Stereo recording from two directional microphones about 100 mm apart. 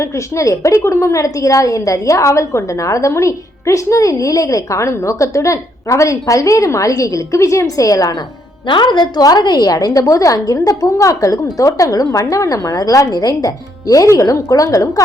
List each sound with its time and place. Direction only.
0.0 s a woman's voice: 30° left (ahead or behind)
8.6 s a woman's voice: 50° left (ahead or behind); by 15.0 s 35° left (ahead or behind)